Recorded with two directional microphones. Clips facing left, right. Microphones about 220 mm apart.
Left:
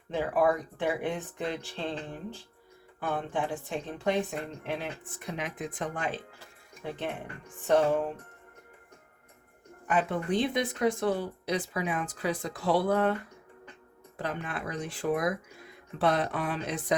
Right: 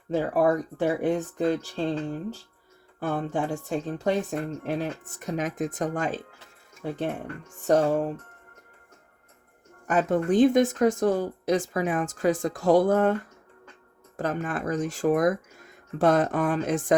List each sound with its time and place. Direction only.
0.1 s speech: 40° right (ahead or behind)
3.0 s speech: 45° right (ahead or behind)
9.8 s speech: 45° right (ahead or behind)
14.2 s speech: 45° right (ahead or behind)